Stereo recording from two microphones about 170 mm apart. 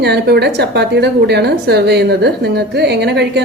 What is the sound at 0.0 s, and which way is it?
A woman's voice, 75° right (ahead or behind).